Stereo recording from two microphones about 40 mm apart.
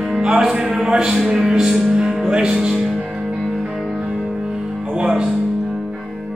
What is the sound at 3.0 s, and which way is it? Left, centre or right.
Music, centre.